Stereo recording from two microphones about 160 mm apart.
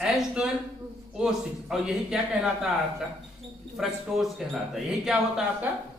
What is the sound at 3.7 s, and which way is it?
Speech, centre (ahead or behind).